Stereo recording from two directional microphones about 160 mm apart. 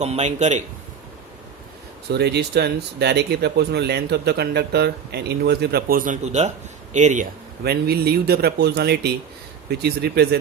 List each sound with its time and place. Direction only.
0.0 s a man's voice: 45° right (ahead or behind)
2.0 s speech: 90° right; by 6.1 s 65° right (ahead or behind)
6.2 s a man's voice: 45° right (ahead or behind)
7.6 s speech: 80° right